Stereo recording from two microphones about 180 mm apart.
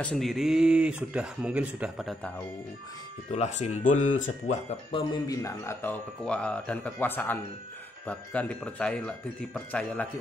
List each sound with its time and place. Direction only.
0.0 s speech: centre (ahead or behind)
3.3 s speech: 40° left (ahead or behind)
4.9 s speech: 25° left (ahead or behind); by 10.0 s 10° left (ahead or behind)